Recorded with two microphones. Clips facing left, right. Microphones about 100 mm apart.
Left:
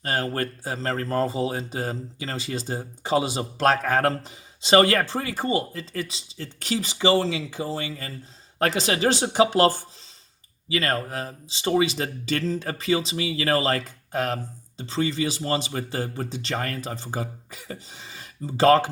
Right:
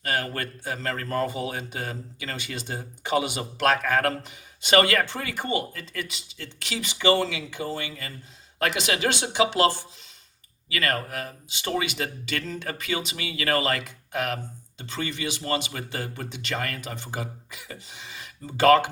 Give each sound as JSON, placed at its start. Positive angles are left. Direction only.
{"t": 0.0, "sound": "speech", "side_deg": 35}
{"t": 10.7, "sound": "speech", "side_deg": 25}